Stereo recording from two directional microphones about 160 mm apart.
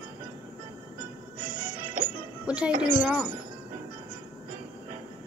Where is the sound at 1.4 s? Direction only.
30° right (ahead or behind).